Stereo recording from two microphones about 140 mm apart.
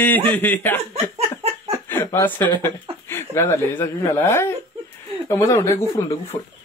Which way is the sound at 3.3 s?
15° left (ahead or behind).